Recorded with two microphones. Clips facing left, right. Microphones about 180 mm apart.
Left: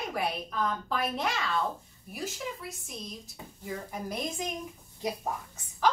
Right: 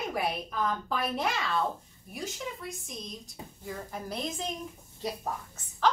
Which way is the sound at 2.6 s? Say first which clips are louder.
Right 1 dB; 5° left (ahead or behind).